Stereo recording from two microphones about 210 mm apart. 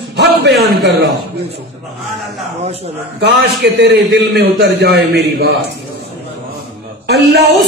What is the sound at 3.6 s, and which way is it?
A man's voice, 55° right (ahead or behind).